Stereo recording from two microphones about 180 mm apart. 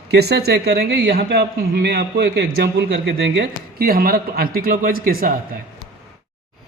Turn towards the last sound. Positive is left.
turn(degrees=-55)  # may be behind; listen again after turning